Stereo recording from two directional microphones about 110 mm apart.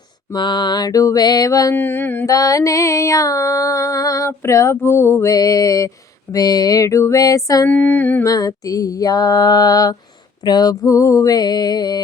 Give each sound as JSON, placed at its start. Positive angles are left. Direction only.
{"t": 0.3, "sound": "music", "side_deg": 45}
{"t": 1.7, "sound": "a sound", "side_deg": 20}
{"t": 2.2, "sound": "music", "side_deg": 30}
{"t": 7.7, "sound": "music", "side_deg": 15}
{"t": 8.2, "sound": "music", "side_deg": 35}